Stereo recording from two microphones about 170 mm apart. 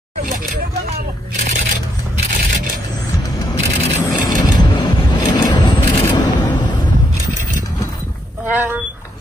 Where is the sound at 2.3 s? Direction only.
55° right (ahead or behind).